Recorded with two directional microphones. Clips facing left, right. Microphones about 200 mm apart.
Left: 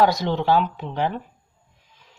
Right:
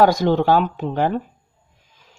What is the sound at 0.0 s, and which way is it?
Speech, 50° right (ahead or behind).